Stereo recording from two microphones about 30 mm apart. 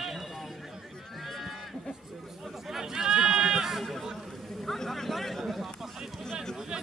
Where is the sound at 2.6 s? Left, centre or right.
Centre.